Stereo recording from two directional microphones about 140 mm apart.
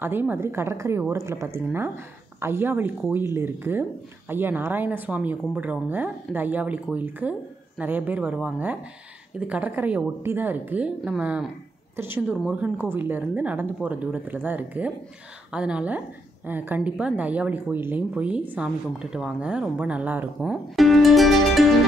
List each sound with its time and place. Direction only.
0.0 s speech: 15° right (ahead or behind)